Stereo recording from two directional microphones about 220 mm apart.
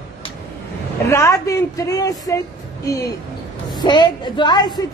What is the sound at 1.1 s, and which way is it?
A woman's voice, 15° left (ahead or behind).